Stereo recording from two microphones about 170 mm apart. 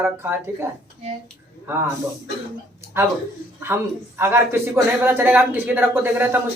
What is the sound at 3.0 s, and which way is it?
Speech, 15° right (ahead or behind).